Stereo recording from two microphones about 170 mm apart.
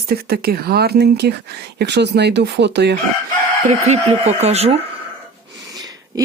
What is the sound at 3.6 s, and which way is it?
Speech, 40° right (ahead or behind).